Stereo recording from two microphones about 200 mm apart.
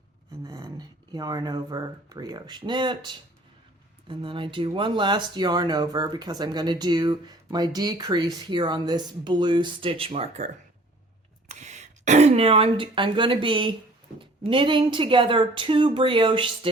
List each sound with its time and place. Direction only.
0.4 s speech: 20° right (ahead or behind)